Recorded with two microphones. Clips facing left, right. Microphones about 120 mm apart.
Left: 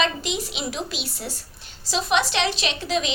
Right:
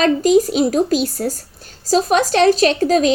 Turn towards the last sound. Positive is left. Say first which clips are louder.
# right 12 dB
turn(degrees=-45)  # may be behind; listen again after turning